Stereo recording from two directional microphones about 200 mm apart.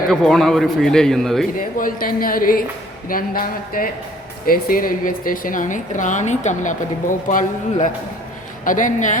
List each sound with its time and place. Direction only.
0.1 s speech: centre (ahead or behind)
1.5 s a woman's voice: 45° left (ahead or behind)